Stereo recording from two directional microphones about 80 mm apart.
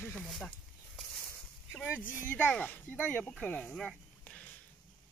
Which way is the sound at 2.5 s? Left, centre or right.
Left.